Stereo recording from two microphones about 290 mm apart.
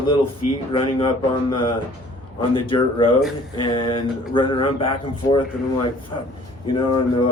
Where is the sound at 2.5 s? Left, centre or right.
Centre.